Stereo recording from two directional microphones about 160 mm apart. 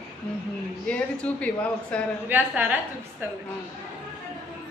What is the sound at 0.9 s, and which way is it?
Speech, 10° left (ahead or behind).